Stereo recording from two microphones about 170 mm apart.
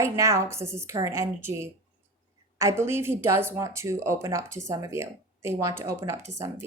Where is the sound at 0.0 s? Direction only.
15° right (ahead or behind).